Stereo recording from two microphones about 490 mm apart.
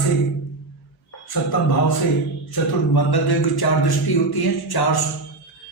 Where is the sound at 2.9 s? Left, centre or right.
Left.